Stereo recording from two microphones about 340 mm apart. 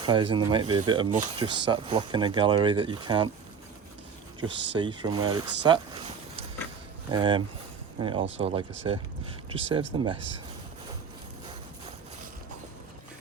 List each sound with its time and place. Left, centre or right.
0.0 s speech: centre
4.4 s speech: centre
7.1 s speech: centre